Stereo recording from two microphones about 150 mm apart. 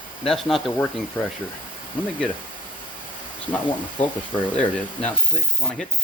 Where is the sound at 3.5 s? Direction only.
10° left (ahead or behind).